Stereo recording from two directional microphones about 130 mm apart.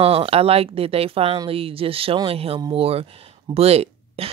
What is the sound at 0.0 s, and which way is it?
Speech, 50° right (ahead or behind).